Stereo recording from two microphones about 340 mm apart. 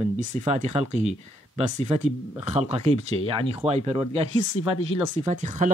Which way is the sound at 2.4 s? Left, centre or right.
Centre.